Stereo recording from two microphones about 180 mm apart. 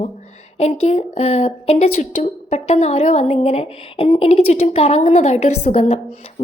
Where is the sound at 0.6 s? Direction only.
35° left (ahead or behind).